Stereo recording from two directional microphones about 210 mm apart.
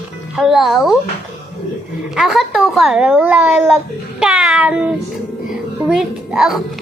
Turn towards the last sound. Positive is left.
turn(degrees=0)  # may be behind; listen again after turning